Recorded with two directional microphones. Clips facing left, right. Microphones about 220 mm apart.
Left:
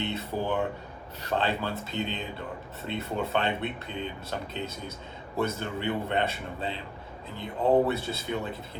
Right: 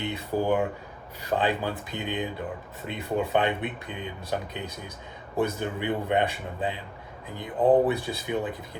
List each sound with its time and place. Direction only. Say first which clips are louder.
0.0 s speech: right 3 dB; 15° right (ahead or behind)